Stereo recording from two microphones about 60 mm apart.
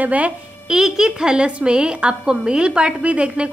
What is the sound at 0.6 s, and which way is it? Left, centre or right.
A woman's voice, centre.